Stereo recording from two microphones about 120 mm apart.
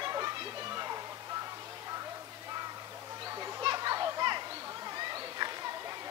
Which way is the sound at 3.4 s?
30° right (ahead or behind).